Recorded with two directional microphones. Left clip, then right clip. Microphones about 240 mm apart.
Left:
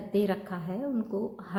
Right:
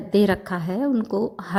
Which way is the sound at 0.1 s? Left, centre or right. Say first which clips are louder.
Right 9 dB; right.